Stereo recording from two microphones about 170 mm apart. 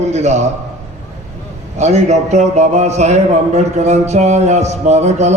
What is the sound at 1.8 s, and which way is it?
Speech, 40° right (ahead or behind).